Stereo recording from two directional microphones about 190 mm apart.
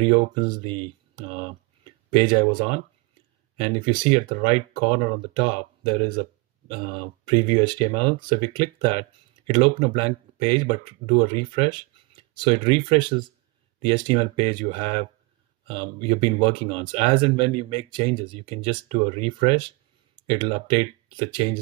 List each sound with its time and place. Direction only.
0.0 s speech: 25° right (ahead or behind)
3.5 s speech: 25° right (ahead or behind)